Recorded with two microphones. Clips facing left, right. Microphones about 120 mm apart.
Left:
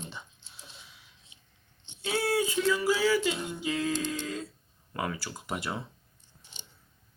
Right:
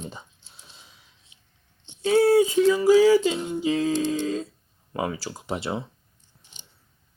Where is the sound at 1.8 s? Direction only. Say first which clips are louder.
Right 12 dB; 40° right (ahead or behind).